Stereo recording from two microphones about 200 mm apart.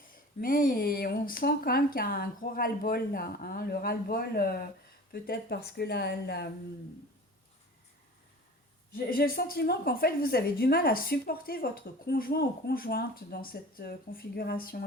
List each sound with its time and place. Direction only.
0.4 s a woman's voice: 45° left (ahead or behind)
9.0 s a woman's voice: 45° left (ahead or behind)